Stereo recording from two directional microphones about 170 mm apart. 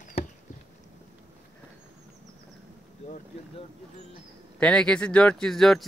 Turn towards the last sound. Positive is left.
turn(degrees=0)  # may be behind; listen again after turning